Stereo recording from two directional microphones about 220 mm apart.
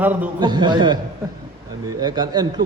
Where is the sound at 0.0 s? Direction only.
10° right (ahead or behind).